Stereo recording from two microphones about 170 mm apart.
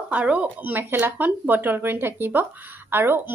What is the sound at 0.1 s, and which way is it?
Speech, 5° right (ahead or behind).